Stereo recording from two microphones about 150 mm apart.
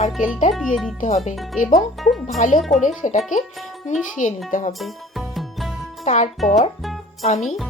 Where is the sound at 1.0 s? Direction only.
50° left (ahead or behind).